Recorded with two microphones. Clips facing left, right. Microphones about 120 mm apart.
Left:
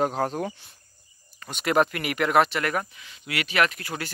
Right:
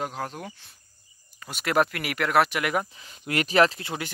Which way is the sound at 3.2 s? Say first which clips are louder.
Right 4 dB; 40° right (ahead or behind).